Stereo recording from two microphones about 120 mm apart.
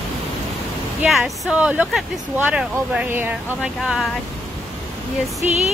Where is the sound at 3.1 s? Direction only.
20° right (ahead or behind).